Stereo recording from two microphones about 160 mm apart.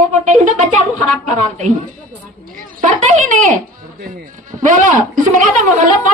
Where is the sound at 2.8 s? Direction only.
50° right (ahead or behind).